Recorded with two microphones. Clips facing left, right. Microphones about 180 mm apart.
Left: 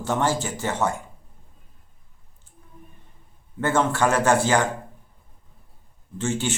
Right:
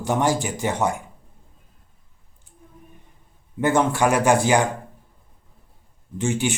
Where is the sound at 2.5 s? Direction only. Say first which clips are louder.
Even; 15° right (ahead or behind).